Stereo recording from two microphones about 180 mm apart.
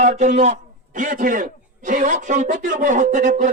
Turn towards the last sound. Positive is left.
turn(degrees=-45)  # may be behind; listen again after turning